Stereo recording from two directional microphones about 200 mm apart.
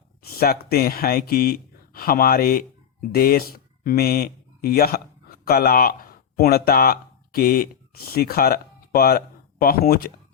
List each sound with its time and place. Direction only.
0.3 s speech: 50° left (ahead or behind)